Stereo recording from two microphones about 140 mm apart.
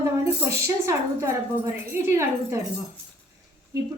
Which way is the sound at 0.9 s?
20° right (ahead or behind).